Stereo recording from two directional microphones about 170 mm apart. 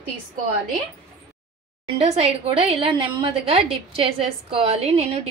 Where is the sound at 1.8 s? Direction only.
35° right (ahead or behind).